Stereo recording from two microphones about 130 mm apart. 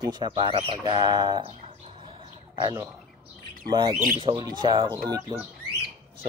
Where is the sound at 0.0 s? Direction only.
35° right (ahead or behind).